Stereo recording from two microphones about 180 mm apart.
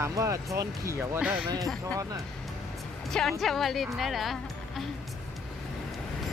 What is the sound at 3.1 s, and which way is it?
A woman's voice, centre (ahead or behind).